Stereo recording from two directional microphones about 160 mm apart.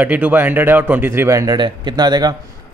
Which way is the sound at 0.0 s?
10° right (ahead or behind).